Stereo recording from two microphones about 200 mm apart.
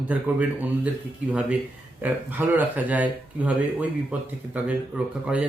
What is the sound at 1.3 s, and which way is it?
Speech, 5° right (ahead or behind).